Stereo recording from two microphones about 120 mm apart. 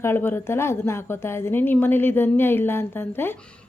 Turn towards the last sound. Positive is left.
turn(degrees=20)  # may be behind; listen again after turning